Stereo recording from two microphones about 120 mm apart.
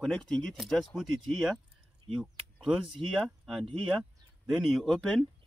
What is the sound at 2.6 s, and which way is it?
Speech, 5° right (ahead or behind).